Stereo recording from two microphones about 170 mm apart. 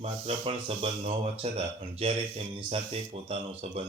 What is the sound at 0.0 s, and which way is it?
Speech, 35° right (ahead or behind).